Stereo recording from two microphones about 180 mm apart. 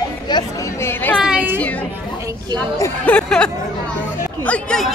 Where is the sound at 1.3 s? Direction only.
10° right (ahead or behind).